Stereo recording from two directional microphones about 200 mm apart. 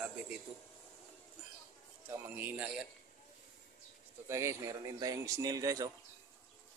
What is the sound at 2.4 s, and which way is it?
Speech, 10° right (ahead or behind).